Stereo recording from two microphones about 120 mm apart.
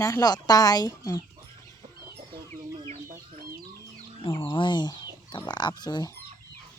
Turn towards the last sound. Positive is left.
turn(degrees=35)  # may be behind; listen again after turning